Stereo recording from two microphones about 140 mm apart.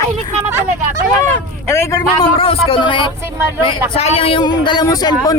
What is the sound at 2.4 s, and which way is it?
Speech, 45° left (ahead or behind).